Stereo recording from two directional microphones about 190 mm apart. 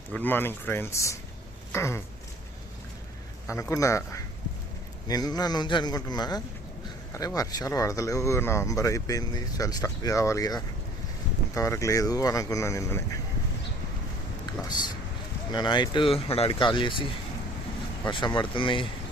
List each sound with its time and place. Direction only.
0.1 s speech: 10° left (ahead or behind)
3.5 s speech: 15° left (ahead or behind)
15.5 s speech: 25° left (ahead or behind)